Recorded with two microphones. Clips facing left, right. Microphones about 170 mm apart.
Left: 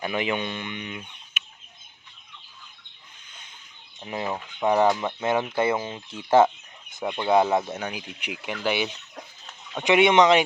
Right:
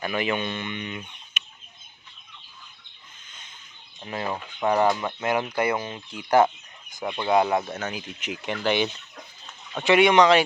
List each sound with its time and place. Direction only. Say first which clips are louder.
0.0 s speech: even; 15° left (ahead or behind)
4.0 s speech: even; 20° left (ahead or behind)
9.8 s speech: even; 20° left (ahead or behind)